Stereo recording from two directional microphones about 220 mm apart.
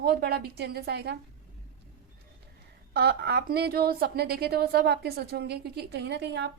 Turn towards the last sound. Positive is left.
turn(degrees=-50)  # may be behind; listen again after turning